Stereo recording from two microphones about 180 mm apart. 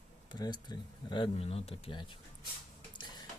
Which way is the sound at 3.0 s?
25° left (ahead or behind).